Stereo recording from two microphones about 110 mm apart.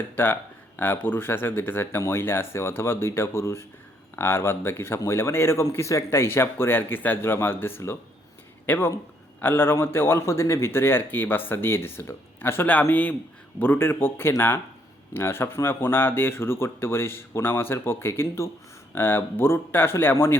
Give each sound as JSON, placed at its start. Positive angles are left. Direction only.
{"t": 0.2, "sound": "a man's voice", "side_deg": 20}